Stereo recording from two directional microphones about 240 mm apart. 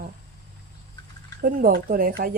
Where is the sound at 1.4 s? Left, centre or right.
Right.